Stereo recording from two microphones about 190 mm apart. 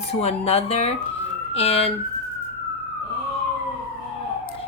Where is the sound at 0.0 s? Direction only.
35° left (ahead or behind).